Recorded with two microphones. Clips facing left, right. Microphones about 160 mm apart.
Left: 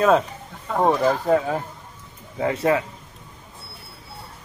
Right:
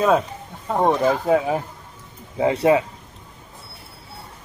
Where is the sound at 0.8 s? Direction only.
5° right (ahead or behind).